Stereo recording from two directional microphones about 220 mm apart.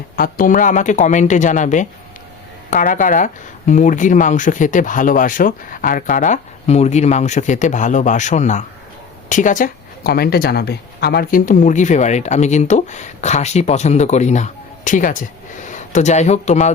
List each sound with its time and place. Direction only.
0.2 s speech: 40° left (ahead or behind)